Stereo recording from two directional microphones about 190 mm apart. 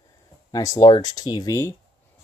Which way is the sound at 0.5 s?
20° left (ahead or behind).